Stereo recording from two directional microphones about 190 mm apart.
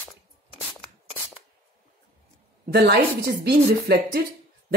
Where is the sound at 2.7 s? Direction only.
60° right (ahead or behind).